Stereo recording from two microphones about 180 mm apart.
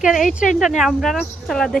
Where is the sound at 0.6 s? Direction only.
Centre (ahead or behind).